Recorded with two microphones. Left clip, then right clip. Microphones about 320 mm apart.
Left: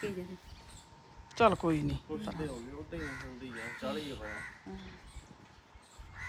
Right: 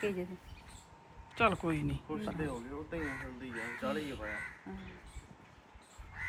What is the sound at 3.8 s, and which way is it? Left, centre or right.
Speech, centre.